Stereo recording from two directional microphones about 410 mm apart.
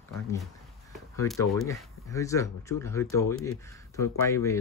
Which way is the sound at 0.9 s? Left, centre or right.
Centre.